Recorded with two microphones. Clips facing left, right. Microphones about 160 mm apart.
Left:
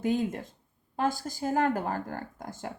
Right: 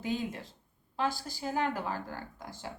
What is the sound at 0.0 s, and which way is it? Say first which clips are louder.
Speech: left 6 dB; 50° left (ahead or behind).